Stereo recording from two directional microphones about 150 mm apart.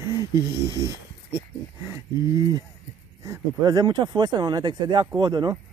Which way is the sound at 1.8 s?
20° right (ahead or behind).